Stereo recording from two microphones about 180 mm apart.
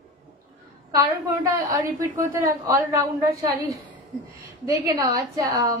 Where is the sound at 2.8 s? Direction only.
15° right (ahead or behind).